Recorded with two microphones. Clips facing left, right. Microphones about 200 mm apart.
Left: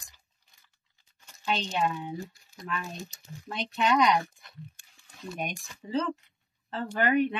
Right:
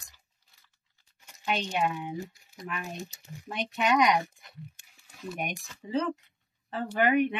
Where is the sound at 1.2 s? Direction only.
15° right (ahead or behind).